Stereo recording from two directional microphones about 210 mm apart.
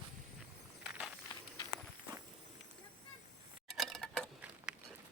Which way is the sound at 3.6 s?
Centre (ahead or behind).